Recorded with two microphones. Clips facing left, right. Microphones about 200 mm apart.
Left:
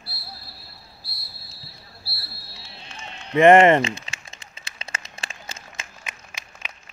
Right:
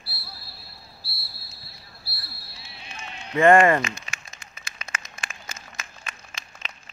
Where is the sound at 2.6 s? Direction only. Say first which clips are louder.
Even; 10° right (ahead or behind).